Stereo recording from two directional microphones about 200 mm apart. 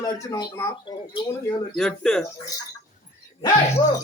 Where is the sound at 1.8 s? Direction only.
5° left (ahead or behind).